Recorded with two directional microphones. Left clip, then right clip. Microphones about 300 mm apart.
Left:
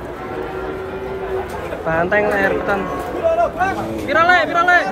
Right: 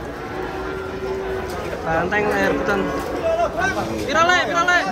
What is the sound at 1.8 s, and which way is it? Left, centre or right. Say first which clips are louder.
Speech: left 4 dB; centre.